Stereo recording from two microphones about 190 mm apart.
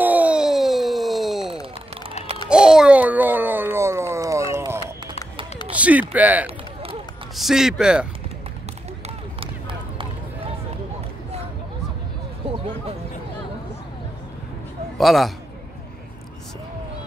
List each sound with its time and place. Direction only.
0.0 s a sound: 10° right (ahead or behind)
2.5 s babbling: 5° right (ahead or behind)
5.7 s speech: 5° right (ahead or behind)
9.0 s run: 30° right (ahead or behind)
15.0 s a man's voice: centre (ahead or behind)